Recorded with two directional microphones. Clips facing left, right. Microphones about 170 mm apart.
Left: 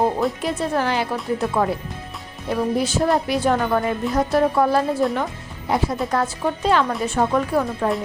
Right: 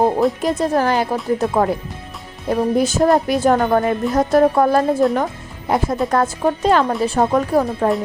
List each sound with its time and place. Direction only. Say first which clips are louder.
0.2 s speech: right 5 dB; 40° right (ahead or behind)